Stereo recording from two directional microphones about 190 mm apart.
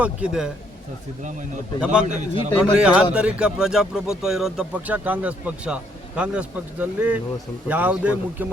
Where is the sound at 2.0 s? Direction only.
40° right (ahead or behind).